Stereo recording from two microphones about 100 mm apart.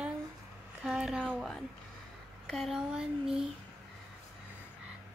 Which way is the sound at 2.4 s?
Centre (ahead or behind).